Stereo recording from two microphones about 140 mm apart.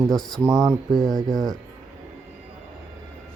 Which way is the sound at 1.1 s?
25° right (ahead or behind).